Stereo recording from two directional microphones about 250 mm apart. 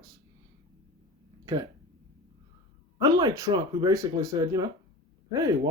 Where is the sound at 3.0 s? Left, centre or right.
Centre.